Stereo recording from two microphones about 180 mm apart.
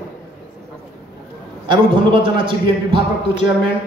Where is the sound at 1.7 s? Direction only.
25° right (ahead or behind).